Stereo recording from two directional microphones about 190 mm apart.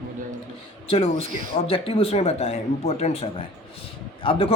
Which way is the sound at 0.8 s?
30° left (ahead or behind).